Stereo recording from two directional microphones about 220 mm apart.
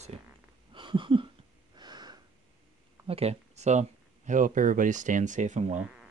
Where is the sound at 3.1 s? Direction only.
30° right (ahead or behind).